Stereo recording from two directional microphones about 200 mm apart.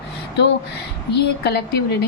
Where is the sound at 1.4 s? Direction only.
55° left (ahead or behind).